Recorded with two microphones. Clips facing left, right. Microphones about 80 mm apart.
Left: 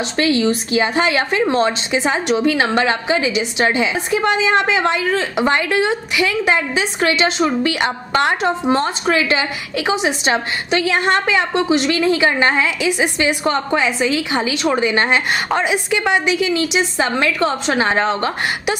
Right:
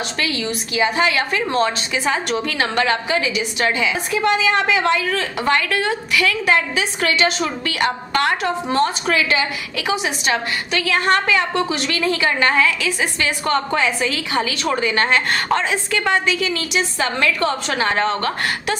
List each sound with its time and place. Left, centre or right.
0.2 s a woman's voice: left